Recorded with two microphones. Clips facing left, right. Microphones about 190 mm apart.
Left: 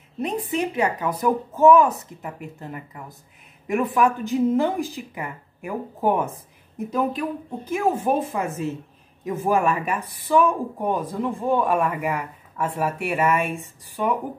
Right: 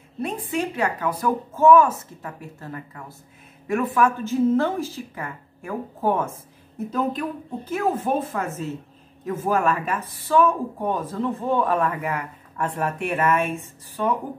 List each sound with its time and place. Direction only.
0.2 s speech: 20° left (ahead or behind)